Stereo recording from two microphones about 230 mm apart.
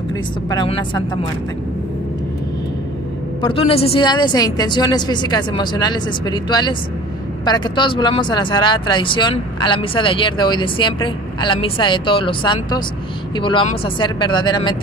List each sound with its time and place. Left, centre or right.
0.5 s speech: centre
3.4 s speech: left